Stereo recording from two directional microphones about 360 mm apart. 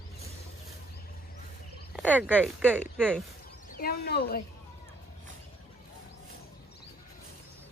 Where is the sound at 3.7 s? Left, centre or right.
Left.